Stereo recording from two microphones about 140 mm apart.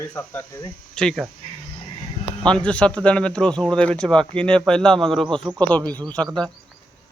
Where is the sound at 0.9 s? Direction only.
Centre (ahead or behind).